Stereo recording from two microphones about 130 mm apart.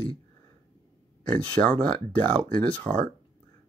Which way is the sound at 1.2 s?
10° left (ahead or behind).